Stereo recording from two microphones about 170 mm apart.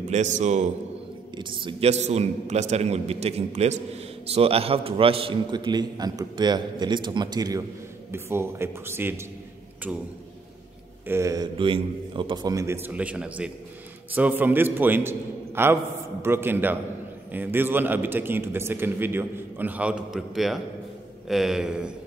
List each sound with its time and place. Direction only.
0.1 s a man's voice: 45° right (ahead or behind)
1.3 s a man's voice: 30° right (ahead or behind); by 10.0 s 5° right (ahead or behind)
11.1 s a man's voice: 15° right (ahead or behind)
11.5 s a man's voice: 30° right (ahead or behind); by 21.9 s 5° right (ahead or behind)